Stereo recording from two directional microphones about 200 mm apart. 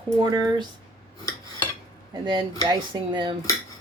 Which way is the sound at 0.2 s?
20° right (ahead or behind).